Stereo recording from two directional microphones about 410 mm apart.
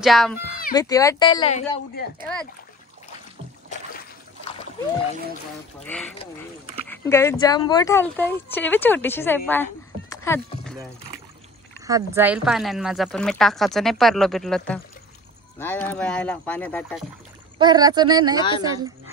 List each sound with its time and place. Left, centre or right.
0.0 s a woman's voice: centre
6.9 s a woman's voice: centre
17.6 s speech: centre